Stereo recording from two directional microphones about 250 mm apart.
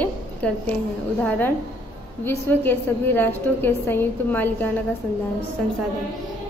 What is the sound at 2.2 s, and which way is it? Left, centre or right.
A woman's voice, centre.